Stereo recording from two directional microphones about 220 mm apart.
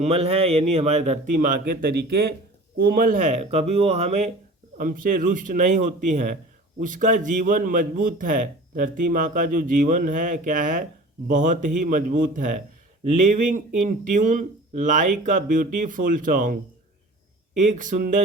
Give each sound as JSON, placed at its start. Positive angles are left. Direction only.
{"t": 0.0, "sound": "a man's voice", "side_deg": -25}